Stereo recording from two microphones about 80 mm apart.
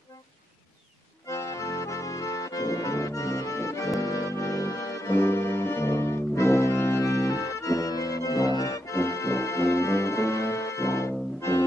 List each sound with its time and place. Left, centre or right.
1.2 s accordion: left